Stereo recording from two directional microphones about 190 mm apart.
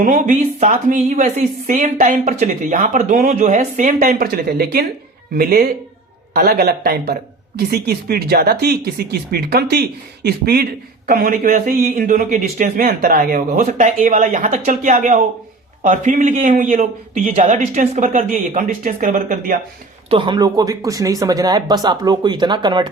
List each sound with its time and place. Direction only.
0.0 s a man's voice: 45° right (ahead or behind)
20.1 s speech: 25° right (ahead or behind)